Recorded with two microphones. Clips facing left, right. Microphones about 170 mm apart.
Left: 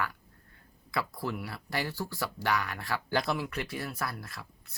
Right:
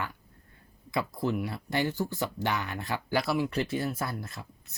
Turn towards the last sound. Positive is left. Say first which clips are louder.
# right 2 dB
turn(degrees=-25)  # may be behind; listen again after turning